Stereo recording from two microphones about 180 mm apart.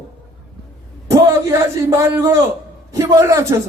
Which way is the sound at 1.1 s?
15° right (ahead or behind).